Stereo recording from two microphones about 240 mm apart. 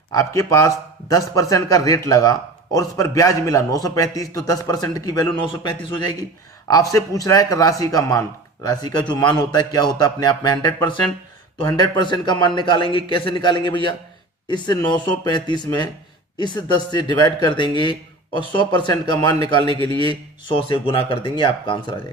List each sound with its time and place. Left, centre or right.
0.1 s a man's voice: centre
12.0 s a man's voice: centre